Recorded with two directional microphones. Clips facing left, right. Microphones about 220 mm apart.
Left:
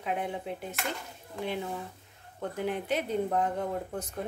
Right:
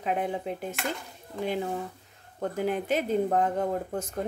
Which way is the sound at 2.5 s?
45° right (ahead or behind).